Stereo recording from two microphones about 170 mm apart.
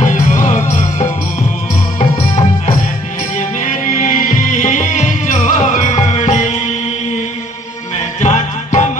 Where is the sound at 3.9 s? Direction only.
55° left (ahead or behind).